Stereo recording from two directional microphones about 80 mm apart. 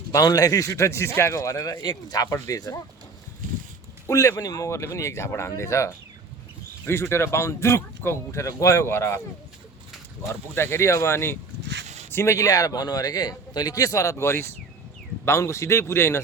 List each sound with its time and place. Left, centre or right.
0.1 s a man's voice: left
1.7 s a man's voice: left
4.0 s speech: left
10.5 s a man's voice: left